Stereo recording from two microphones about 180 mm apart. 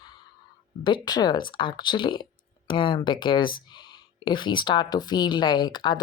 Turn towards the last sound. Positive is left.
turn(degrees=25)  # may be behind; listen again after turning